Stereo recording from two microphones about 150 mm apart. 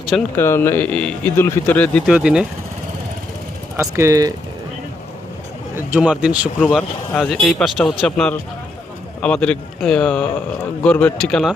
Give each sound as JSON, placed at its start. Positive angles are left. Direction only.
{"t": 0.3, "sound": "speech", "side_deg": 15}
{"t": 2.0, "sound": "speech", "side_deg": -5}
{"t": 3.8, "sound": "speech", "side_deg": -20}
{"t": 5.7, "sound": "speech", "side_deg": -10}
{"t": 6.6, "sound": "speech", "side_deg": 5}